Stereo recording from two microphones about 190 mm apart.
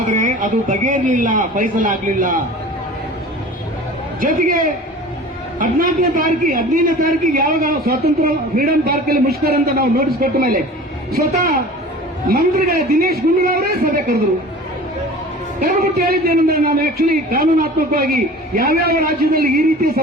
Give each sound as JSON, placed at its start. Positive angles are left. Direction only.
{"t": 0.0, "sound": "a man's voice", "side_deg": -45}
{"t": 4.2, "sound": "a man's voice", "side_deg": -45}
{"t": 12.3, "sound": "a man's voice", "side_deg": -55}
{"t": 15.6, "sound": "a man's voice", "side_deg": -50}